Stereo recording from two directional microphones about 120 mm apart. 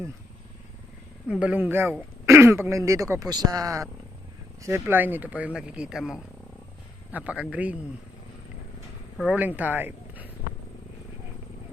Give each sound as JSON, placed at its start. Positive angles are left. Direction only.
{"t": 1.3, "sound": "speech", "side_deg": -10}
{"t": 4.6, "sound": "speech", "side_deg": -20}
{"t": 9.2, "sound": "speech", "side_deg": -10}